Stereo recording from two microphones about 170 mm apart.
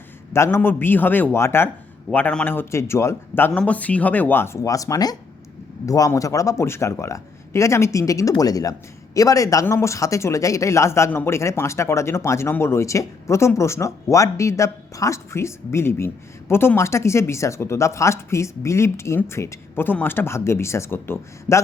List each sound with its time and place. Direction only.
0.3 s speech: 15° left (ahead or behind)